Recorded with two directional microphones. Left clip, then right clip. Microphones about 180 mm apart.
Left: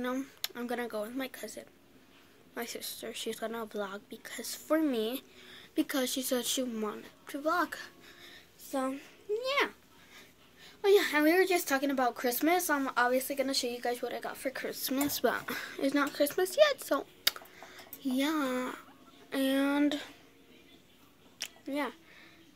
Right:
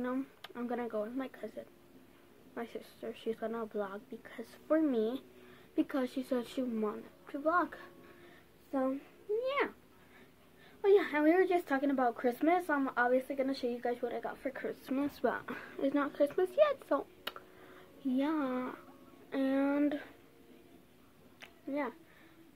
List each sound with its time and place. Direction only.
0.0 s a woman's voice: 20° left (ahead or behind)
10.8 s a woman's voice: 20° left (ahead or behind)
18.0 s a woman's voice: 20° left (ahead or behind)
21.4 s a sound: 25° left (ahead or behind)